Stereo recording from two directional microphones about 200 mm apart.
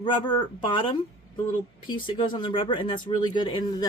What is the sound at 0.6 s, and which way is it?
Speech, 25° left (ahead or behind).